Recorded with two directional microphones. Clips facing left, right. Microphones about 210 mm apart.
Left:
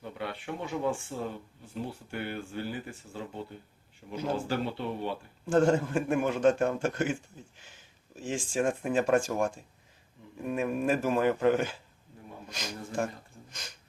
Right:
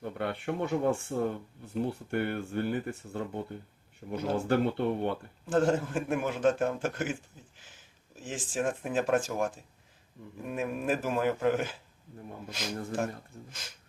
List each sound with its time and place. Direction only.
0.0 s speech: 55° right (ahead or behind)
5.5 s a man's voice: centre (ahead or behind)